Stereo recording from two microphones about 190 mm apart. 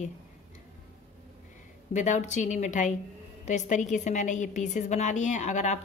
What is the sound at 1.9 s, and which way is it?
A woman's voice, 40° left (ahead or behind).